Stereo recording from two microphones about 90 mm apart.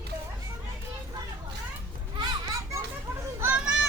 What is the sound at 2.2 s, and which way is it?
Children playing, 40° right (ahead or behind).